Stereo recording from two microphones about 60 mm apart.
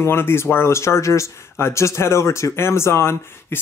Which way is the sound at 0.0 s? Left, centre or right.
Left.